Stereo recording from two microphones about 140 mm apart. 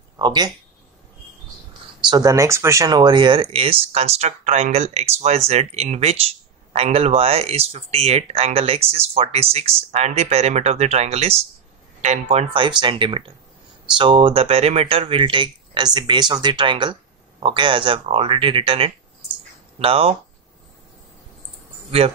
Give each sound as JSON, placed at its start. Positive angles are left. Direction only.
{"t": 0.2, "sound": "speech", "side_deg": -30}
{"t": 2.0, "sound": "speech", "side_deg": -30}